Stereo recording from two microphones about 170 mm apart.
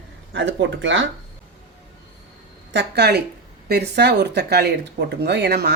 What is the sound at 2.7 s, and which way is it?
Speech, 75° right (ahead or behind).